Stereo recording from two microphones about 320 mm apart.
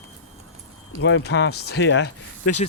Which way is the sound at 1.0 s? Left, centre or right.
Left.